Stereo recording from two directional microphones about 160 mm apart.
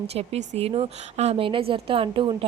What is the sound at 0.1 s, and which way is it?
A woman's voice, 40° right (ahead or behind).